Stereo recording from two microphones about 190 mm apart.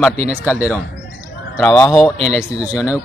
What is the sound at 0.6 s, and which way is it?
Speech, 10° right (ahead or behind).